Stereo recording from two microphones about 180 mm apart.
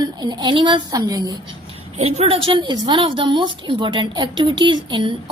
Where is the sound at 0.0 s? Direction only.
25° right (ahead or behind).